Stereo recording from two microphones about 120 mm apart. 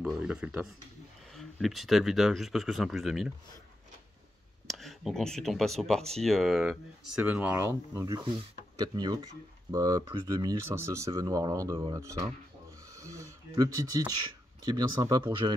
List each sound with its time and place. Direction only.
0.0 s speech: 10° right (ahead or behind)
4.6 s speech: centre (ahead or behind); by 7.7 s 20° right (ahead or behind)
7.9 s speech: 30° right (ahead or behind)